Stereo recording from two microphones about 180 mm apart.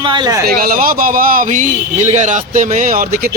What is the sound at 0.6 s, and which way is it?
Speech, 50° right (ahead or behind).